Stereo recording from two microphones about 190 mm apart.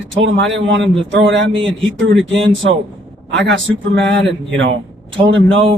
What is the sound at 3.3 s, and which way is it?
Speech, 65° right (ahead or behind).